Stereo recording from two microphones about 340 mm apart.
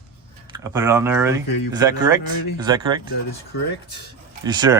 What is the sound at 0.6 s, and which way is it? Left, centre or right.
Speech, centre.